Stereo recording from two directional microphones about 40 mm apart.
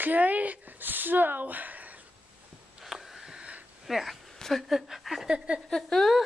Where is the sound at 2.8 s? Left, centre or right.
Centre.